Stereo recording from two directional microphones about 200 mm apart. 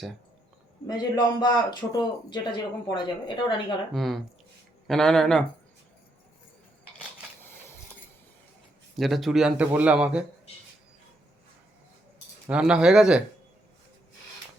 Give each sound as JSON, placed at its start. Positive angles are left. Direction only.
{"t": 0.9, "sound": "a man's voice", "side_deg": 20}
{"t": 3.9, "sound": "a man's voice", "side_deg": 0}
{"t": 7.4, "sound": "a sound", "side_deg": 10}
{"t": 9.0, "sound": "a man's voice", "side_deg": 0}
{"t": 12.5, "sound": "a man's voice", "side_deg": -5}